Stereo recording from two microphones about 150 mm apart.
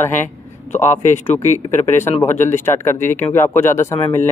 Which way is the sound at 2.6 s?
15° left (ahead or behind).